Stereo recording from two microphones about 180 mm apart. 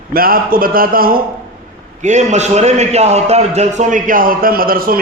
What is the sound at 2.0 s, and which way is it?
A man's voice, 40° right (ahead or behind).